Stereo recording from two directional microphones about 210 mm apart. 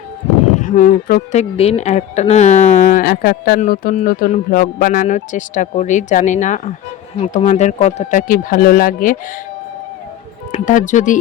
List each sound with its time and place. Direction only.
0.6 s speech: 40° left (ahead or behind)
10.5 s speech: 35° left (ahead or behind)